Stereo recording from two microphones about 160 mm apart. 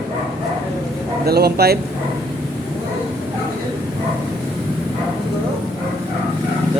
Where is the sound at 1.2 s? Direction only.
75° right (ahead or behind).